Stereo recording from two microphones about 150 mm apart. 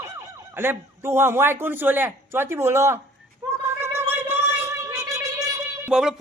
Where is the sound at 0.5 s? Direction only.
15° right (ahead or behind).